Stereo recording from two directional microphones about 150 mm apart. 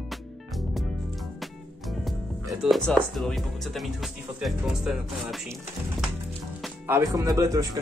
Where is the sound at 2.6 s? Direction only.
Centre (ahead or behind).